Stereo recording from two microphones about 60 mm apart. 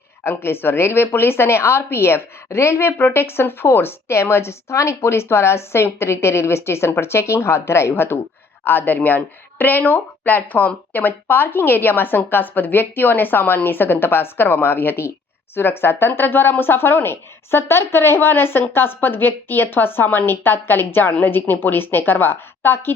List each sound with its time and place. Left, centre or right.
0.3 s a woman's voice: left